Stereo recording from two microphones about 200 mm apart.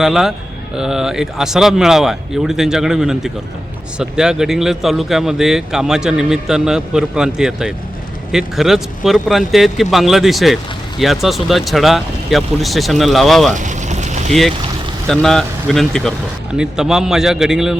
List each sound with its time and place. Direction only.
0.0 s a man's voice: centre (ahead or behind)
13.5 s vehicle: 40° right (ahead or behind)
15.0 s a man's voice: centre (ahead or behind)